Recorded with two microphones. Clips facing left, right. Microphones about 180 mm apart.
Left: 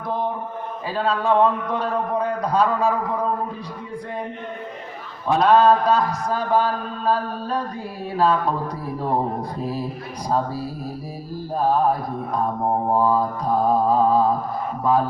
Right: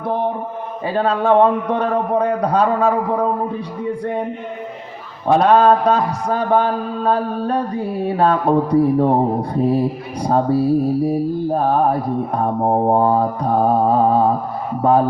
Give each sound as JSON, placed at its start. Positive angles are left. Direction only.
{"t": 0.9, "sound": "mantra", "side_deg": -60}
{"t": 5.4, "sound": "mantra", "side_deg": -60}